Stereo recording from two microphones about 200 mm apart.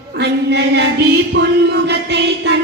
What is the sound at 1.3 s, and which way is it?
Music, 55° right (ahead or behind).